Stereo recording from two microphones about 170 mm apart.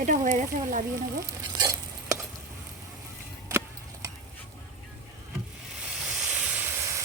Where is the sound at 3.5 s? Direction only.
15° right (ahead or behind).